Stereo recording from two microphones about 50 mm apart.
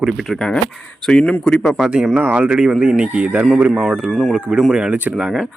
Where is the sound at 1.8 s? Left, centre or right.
Centre.